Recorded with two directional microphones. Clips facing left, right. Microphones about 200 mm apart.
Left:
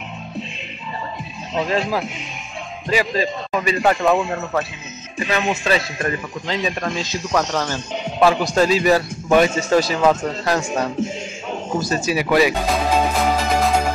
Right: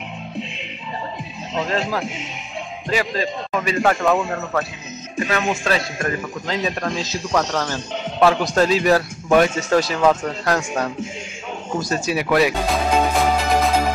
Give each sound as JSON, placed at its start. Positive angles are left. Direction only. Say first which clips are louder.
{"t": 1.5, "sound": "a man's voice", "louder": "left 2 dB", "side_deg": 10}
{"t": 11.7, "sound": "music", "louder": "left 1 dB", "side_deg": 0}